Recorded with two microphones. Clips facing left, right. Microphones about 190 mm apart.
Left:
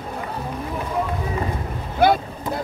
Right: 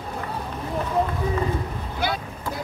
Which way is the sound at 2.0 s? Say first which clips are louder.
Left 10 dB; 55° left (ahead or behind).